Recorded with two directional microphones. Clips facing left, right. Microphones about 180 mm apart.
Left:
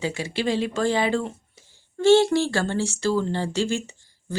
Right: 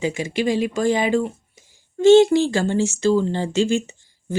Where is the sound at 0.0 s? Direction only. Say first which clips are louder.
Right 4 dB; 15° right (ahead or behind).